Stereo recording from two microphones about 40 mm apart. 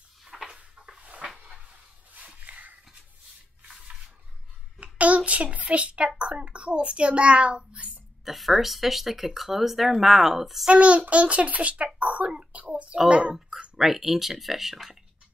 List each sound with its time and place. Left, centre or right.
0.2 s a sound: centre
0.7 s cupboard open or close: right
1.0 s dog: right
4.9 s a child's voice: right
8.2 s speech: centre
10.7 s a child's voice: right
13.7 s speech: centre